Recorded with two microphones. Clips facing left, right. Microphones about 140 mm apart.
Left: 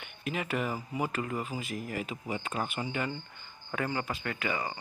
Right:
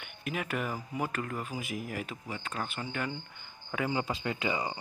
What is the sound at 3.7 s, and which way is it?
Speech, 10° right (ahead or behind).